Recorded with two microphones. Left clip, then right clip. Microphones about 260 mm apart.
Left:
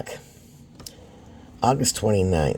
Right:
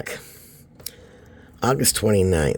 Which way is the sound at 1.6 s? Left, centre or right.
Right.